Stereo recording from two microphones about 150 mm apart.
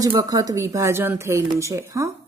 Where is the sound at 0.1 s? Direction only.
25° right (ahead or behind).